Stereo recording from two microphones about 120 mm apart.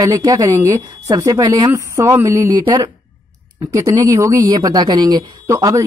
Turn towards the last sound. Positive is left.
turn(degrees=-25)  # may be behind; listen again after turning